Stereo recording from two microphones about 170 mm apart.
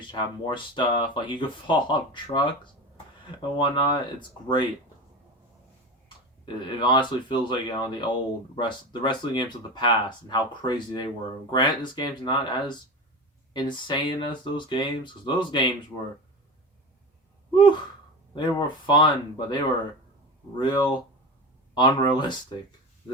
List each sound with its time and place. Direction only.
0.0 s speech: 25° left (ahead or behind)
3.6 s speech: 25° left (ahead or behind)
6.4 s speech: 25° left (ahead or behind)
17.5 s gasp: 25° left (ahead or behind)
18.3 s speech: 25° left (ahead or behind)